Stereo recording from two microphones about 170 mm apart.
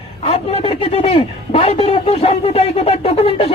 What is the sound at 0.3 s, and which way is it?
Speech, 35° left (ahead or behind).